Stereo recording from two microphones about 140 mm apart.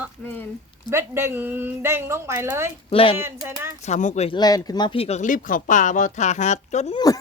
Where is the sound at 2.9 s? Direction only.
40° left (ahead or behind).